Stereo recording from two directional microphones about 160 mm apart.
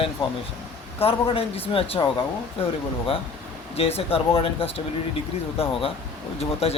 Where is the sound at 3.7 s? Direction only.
40° left (ahead or behind).